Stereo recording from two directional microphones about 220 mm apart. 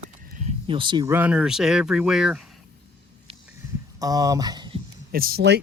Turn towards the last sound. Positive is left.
turn(degrees=-45)  # may be behind; listen again after turning